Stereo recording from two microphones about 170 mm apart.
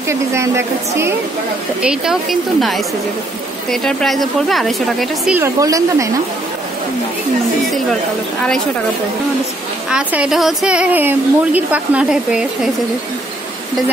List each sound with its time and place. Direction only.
0.1 s a woman's voice: 15° right (ahead or behind)
1.8 s a woman's voice: 5° right (ahead or behind)
3.7 s a woman's voice: centre (ahead or behind)
5.4 s a woman's voice: 20° right (ahead or behind)
9.8 s a woman's voice: 5° right (ahead or behind)